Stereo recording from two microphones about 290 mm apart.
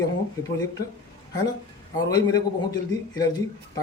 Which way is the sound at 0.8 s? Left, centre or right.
Left.